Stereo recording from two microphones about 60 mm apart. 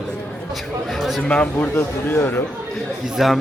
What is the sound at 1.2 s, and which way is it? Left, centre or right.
Speech, centre.